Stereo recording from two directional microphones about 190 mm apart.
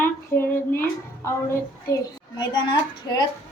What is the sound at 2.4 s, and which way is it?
Speech, 20° left (ahead or behind).